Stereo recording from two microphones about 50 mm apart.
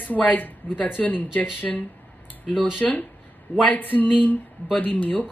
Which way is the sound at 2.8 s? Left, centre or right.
Left.